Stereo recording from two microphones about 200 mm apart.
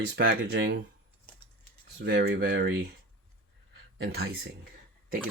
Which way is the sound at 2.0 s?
55° right (ahead or behind).